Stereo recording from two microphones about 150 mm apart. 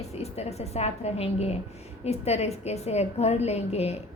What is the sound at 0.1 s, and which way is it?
A woman's voice, 45° left (ahead or behind).